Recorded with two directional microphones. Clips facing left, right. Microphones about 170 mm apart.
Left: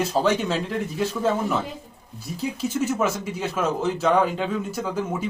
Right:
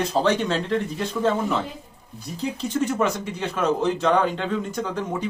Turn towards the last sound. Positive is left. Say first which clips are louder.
# even
turn(degrees=5)  # may be behind; listen again after turning